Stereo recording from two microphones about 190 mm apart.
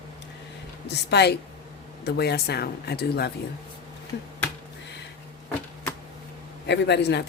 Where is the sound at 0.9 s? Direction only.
60° left (ahead or behind).